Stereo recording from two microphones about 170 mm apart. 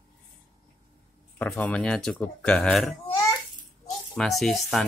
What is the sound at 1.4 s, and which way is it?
Speech, 10° left (ahead or behind).